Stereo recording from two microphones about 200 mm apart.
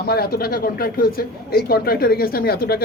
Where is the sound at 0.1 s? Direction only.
50° left (ahead or behind).